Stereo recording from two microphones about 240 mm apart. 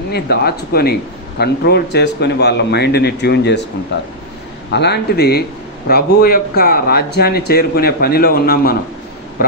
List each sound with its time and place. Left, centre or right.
0.1 s a man's voice: left